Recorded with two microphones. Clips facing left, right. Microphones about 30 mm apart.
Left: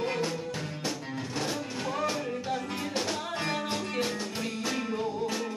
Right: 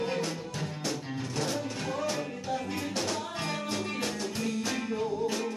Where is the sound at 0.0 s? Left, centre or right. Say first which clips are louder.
Left 1 dB; centre.